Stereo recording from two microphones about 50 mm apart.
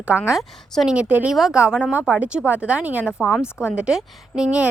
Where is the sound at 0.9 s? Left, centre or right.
Right.